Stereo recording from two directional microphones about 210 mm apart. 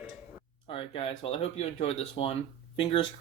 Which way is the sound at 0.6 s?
25° left (ahead or behind).